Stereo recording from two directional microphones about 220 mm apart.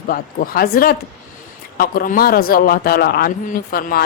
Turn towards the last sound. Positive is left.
turn(degrees=40)  # may be behind; listen again after turning